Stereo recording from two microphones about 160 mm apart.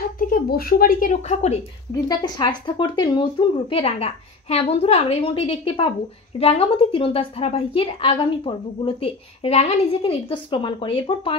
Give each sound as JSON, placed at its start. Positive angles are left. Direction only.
{"t": 0.2, "sound": "a woman's voice", "side_deg": 65}
{"t": 2.0, "sound": "a woman's voice", "side_deg": 25}